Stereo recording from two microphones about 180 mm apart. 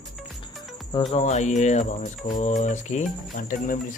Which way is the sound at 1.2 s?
40° left (ahead or behind).